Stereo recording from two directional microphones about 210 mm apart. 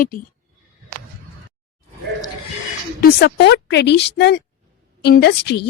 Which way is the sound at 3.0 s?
55° left (ahead or behind).